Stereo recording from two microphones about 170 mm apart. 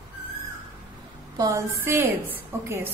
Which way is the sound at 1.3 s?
20° right (ahead or behind).